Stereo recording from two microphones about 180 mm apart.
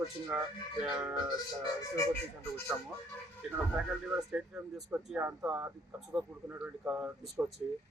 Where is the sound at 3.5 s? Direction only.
5° right (ahead or behind).